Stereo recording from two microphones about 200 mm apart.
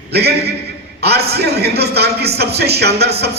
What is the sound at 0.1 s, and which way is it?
A man's voice, 55° right (ahead or behind).